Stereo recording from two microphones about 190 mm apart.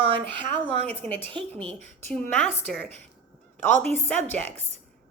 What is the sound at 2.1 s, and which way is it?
Speech, 5° left (ahead or behind).